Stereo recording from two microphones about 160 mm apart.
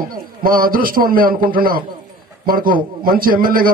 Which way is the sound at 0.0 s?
65° right (ahead or behind).